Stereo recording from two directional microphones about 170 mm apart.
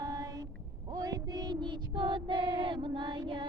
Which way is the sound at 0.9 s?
20° right (ahead or behind).